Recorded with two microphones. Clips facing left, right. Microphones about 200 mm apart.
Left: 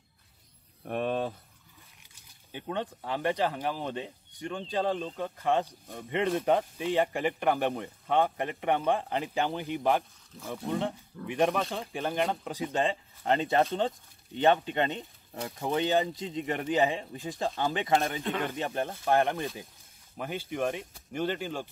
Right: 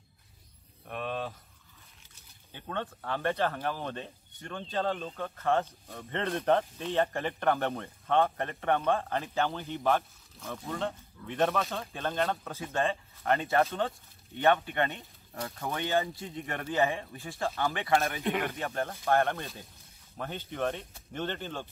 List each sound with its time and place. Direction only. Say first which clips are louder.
0.8 s speech: left 5 dB; 45° left (ahead or behind)
2.5 s speech: left 3 dB; 15° left (ahead or behind)